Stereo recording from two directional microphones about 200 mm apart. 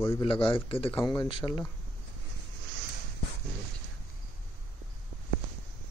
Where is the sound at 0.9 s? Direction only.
15° left (ahead or behind).